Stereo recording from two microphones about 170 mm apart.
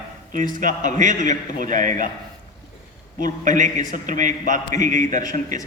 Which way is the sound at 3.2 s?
50° right (ahead or behind).